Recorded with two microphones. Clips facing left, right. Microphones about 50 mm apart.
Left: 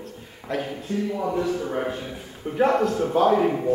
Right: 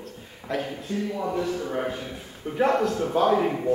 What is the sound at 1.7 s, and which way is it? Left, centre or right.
A man's voice, centre.